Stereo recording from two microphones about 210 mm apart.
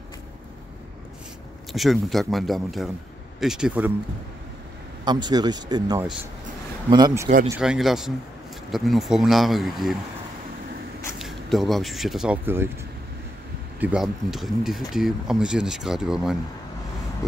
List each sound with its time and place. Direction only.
1.7 s speech: centre (ahead or behind)
5.0 s speech: 20° right (ahead or behind)
7.4 s speech: 5° right (ahead or behind)
11.1 s speech: centre (ahead or behind)
13.7 s speech: 5° right (ahead or behind)